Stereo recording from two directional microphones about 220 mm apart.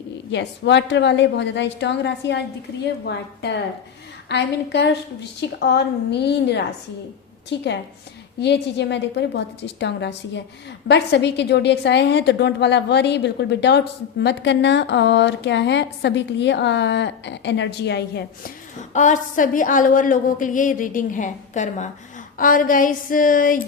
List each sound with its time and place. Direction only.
0.3 s a woman's voice: 55° left (ahead or behind)
18.8 s a woman's voice: 35° left (ahead or behind)